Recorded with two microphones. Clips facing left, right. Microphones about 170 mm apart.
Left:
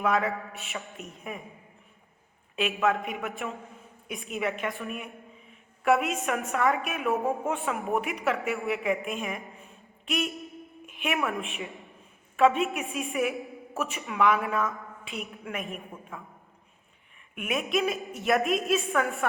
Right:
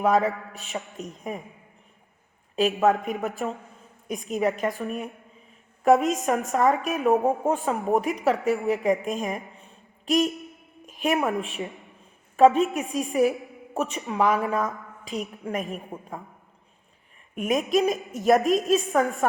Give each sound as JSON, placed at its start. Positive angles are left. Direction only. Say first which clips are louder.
{"t": 0.0, "sound": "speech", "louder": "right 5 dB", "side_deg": -35}
{"t": 2.6, "sound": "a woman's voice", "louder": "right 5 dB", "side_deg": -40}
{"t": 9.6, "sound": "a sound", "louder": "left 1 dB", "side_deg": -35}
{"t": 10.8, "sound": "a woman's voice", "louder": "right 6 dB", "side_deg": -40}
{"t": 17.3, "sound": "speech", "louder": "right 6 dB", "side_deg": -35}